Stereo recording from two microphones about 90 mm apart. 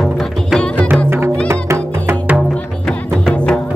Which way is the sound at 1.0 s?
25° right (ahead or behind).